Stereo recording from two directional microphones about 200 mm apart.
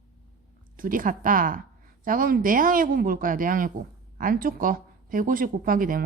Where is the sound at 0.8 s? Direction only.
45° right (ahead or behind).